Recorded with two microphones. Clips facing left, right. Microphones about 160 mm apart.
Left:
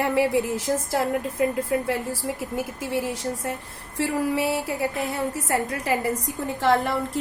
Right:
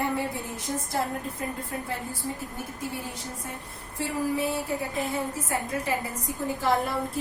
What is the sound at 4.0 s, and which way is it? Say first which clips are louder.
A woman's voice: left 4 dB; 80° left.